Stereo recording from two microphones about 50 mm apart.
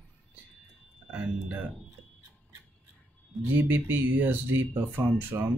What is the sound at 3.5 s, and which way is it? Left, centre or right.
Speech, right.